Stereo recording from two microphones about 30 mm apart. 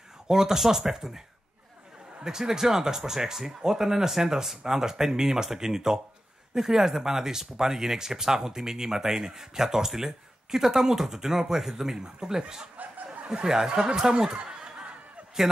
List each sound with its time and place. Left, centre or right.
0.3 s speech: centre
2.2 s speech: centre